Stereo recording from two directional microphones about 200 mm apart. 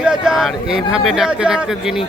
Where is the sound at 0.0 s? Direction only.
5° right (ahead or behind).